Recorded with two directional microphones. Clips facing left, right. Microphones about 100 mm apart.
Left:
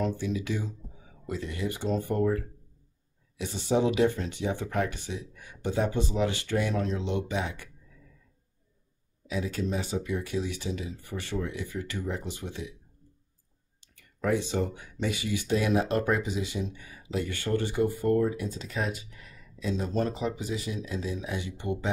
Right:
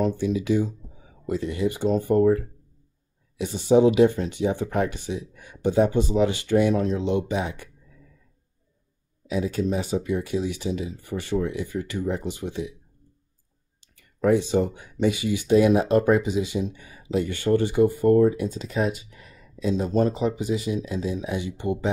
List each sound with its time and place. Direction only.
0.0 s speech: 15° right (ahead or behind)
3.3 s speech: 15° right (ahead or behind)
9.3 s speech: 15° right (ahead or behind)
14.2 s speech: 20° right (ahead or behind)